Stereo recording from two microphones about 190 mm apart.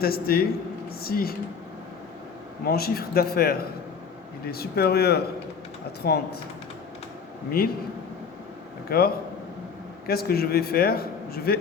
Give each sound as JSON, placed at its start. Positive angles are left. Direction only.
{"t": 0.0, "sound": "a man's voice", "side_deg": 55}
{"t": 2.6, "sound": "a man's voice", "side_deg": 55}
{"t": 7.6, "sound": "speech", "side_deg": 55}
{"t": 8.9, "sound": "a man's voice", "side_deg": 55}